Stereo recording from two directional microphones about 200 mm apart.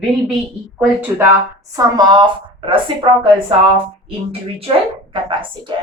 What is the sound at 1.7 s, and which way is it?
Speech, 20° right (ahead or behind).